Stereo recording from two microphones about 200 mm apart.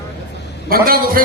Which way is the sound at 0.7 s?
45° right (ahead or behind).